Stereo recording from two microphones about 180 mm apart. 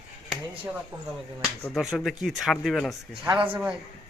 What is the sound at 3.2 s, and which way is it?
Speech, 25° right (ahead or behind).